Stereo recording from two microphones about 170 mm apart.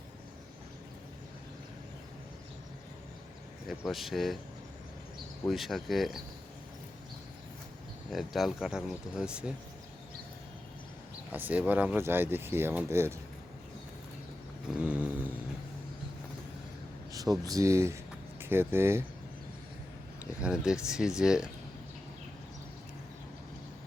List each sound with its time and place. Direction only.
3.7 s speech: centre (ahead or behind)
5.5 s speech: centre (ahead or behind)
8.1 s speech: centre (ahead or behind)
11.3 s speech: 10° right (ahead or behind)
14.8 s a sound: 10° right (ahead or behind)
17.1 s speech: 20° right (ahead or behind)
20.4 s speech: 5° right (ahead or behind)